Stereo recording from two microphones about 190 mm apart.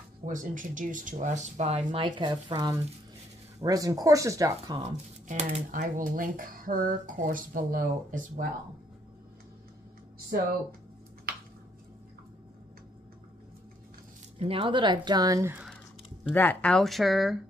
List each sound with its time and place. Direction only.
0.3 s speech: 45° right (ahead or behind)
2.0 s speech: 25° right (ahead or behind)
4.8 s speech: 40° right (ahead or behind)
14.4 s speech: 30° right (ahead or behind)
16.3 s speech: 10° left (ahead or behind)